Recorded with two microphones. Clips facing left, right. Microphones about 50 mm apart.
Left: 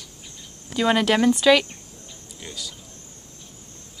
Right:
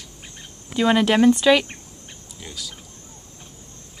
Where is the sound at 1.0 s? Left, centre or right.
Centre.